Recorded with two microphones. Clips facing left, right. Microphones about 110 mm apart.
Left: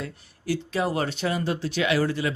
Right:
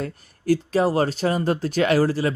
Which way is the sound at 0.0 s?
45° right (ahead or behind).